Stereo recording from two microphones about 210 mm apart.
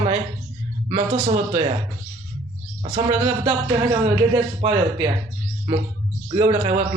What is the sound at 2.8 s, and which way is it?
Speech, 25° right (ahead or behind).